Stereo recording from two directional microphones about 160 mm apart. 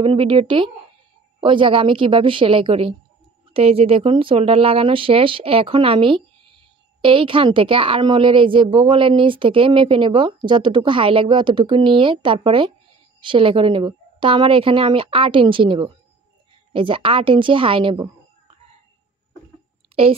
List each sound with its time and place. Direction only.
0.0 s a woman's voice: 35° right (ahead or behind)